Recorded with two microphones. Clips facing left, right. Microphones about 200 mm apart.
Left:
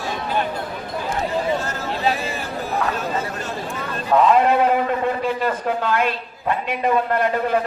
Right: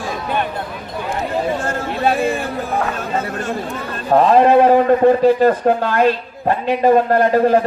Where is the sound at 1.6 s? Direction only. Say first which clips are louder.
Right 4 dB; 50° right (ahead or behind).